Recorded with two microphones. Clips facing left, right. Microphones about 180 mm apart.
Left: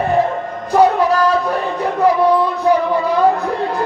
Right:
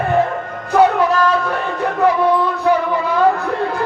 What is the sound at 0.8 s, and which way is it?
Music, 35° left (ahead or behind).